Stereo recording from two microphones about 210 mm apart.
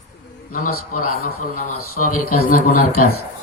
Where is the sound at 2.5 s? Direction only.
40° left (ahead or behind).